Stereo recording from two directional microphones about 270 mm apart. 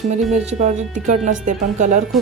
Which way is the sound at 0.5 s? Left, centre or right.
Right.